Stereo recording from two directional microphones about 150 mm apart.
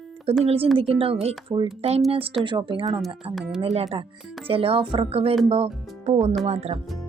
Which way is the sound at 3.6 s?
40° right (ahead or behind).